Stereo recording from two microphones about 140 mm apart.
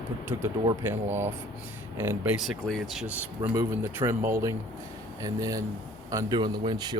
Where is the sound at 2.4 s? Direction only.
Centre (ahead or behind).